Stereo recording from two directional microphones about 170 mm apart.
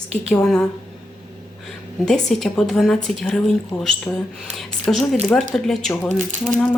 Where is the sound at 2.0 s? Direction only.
Centre (ahead or behind).